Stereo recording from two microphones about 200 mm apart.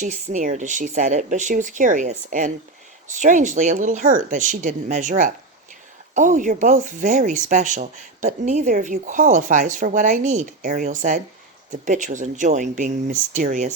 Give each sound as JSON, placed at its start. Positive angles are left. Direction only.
{"t": 0.0, "sound": "speech", "side_deg": -35}